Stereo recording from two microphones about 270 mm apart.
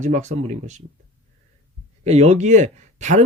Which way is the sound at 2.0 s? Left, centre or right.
Right.